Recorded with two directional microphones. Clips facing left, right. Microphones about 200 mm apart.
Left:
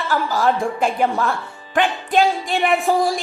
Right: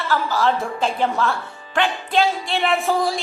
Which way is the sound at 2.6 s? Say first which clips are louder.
Left 2 dB; 15° left (ahead or behind).